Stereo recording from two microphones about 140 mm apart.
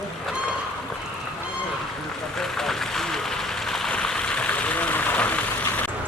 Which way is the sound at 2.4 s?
5° left (ahead or behind).